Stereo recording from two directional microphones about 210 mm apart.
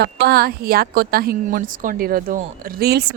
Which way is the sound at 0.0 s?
50° right (ahead or behind).